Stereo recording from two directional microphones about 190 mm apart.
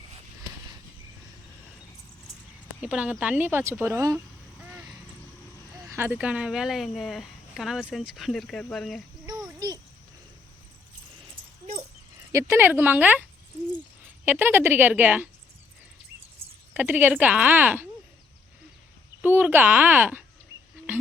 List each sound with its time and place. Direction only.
2.8 s speech: 5° right (ahead or behind)
4.6 s vehicle: 5° right (ahead or behind)
5.9 s a woman's voice: 10° right (ahead or behind)
9.6 s a sound: 20° right (ahead or behind)
11.6 s dog: 40° right (ahead or behind)
12.3 s speech: 15° right (ahead or behind)
14.3 s speech: 10° right (ahead or behind)
16.7 s speech: 10° right (ahead or behind)
19.2 s speech: 10° right (ahead or behind)